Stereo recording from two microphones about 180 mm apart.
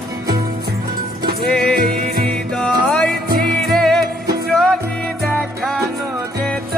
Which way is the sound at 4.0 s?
60° right (ahead or behind).